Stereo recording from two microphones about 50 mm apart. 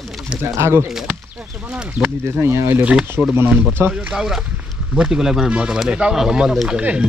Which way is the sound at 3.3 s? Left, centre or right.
Right.